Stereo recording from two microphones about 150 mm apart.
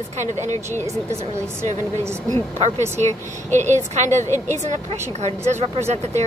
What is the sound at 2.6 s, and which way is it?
A woman's voice, 50° right (ahead or behind).